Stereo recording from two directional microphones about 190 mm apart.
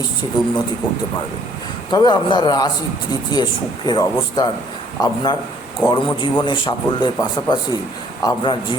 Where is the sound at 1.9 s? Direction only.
25° left (ahead or behind).